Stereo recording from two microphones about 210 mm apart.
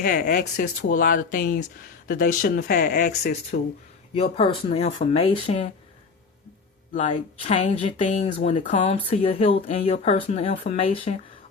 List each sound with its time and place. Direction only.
0.0 s speech: 45° left (ahead or behind)
4.1 s speech: 25° left (ahead or behind)
7.1 s speech: 25° left (ahead or behind)